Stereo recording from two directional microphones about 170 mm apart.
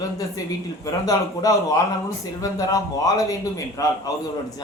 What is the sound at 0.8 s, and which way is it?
A man's voice, 20° left (ahead or behind).